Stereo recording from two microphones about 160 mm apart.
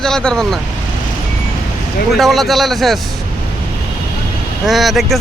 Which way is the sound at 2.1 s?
Centre (ahead or behind).